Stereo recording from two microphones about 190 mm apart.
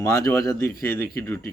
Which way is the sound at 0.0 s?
15° left (ahead or behind).